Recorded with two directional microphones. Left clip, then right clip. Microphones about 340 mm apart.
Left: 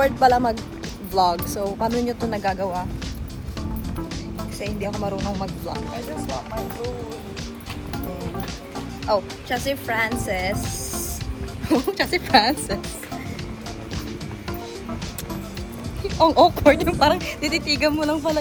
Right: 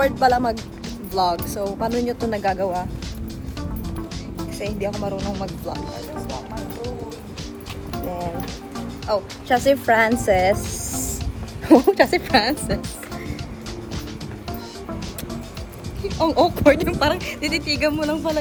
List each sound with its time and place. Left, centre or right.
0.0 s speech: centre
4.4 s speech: centre
9.1 s speech: centre
9.5 s a woman's voice: right
11.9 s a woman's voice: right
12.3 s speech: centre
16.1 s speech: centre